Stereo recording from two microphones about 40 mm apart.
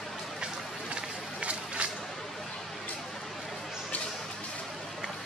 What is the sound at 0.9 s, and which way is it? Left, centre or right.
Run, right.